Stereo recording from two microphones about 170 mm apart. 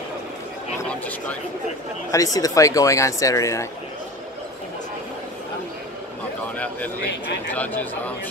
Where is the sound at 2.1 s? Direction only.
20° left (ahead or behind).